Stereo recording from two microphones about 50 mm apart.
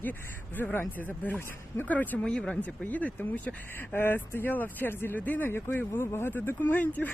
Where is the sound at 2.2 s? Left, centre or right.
Centre.